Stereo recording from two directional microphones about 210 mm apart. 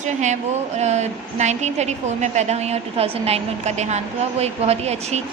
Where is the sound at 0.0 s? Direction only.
35° right (ahead or behind).